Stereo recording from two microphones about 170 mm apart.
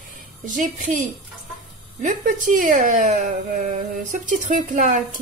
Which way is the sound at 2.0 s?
50° right (ahead or behind).